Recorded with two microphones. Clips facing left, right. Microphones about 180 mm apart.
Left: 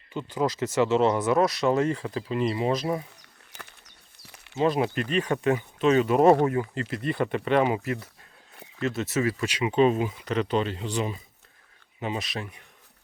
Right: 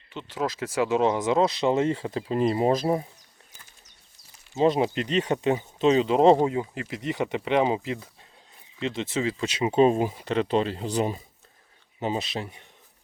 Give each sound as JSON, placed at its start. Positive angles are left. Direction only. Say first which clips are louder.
{"t": 0.1, "sound": "speech", "louder": "left 3 dB", "side_deg": 5}
{"t": 0.6, "sound": "speech", "louder": "left 1 dB", "side_deg": -10}
{"t": 2.3, "sound": "speech", "louder": "right 3 dB", "side_deg": -45}
{"t": 3.5, "sound": "a sound", "louder": "left 11 dB", "side_deg": 70}
{"t": 4.5, "sound": "speech", "louder": "right 2 dB", "side_deg": -25}
{"t": 9.6, "sound": "speech", "louder": "right 2 dB", "side_deg": -35}